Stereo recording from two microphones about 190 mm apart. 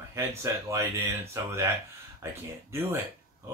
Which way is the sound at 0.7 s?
15° right (ahead or behind).